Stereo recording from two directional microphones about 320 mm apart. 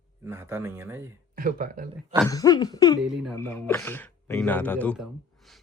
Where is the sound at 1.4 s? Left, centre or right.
Right.